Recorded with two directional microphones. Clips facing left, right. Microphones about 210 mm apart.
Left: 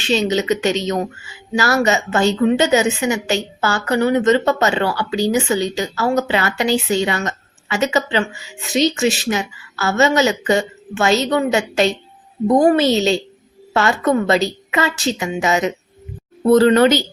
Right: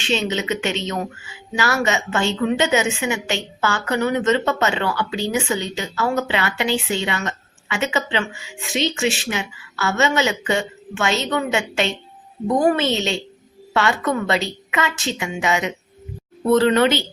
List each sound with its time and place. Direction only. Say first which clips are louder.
0.0 s a woman's voice: left 5 dB; 40° left (ahead or behind)